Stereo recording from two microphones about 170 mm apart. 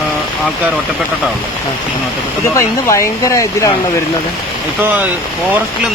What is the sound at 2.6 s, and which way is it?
Speech, 20° left (ahead or behind).